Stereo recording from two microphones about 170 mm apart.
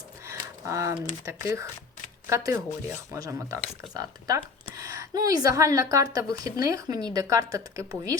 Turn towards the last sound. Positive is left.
turn(degrees=-20)  # may be behind; listen again after turning